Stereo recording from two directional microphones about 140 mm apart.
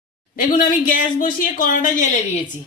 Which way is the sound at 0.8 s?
90° left.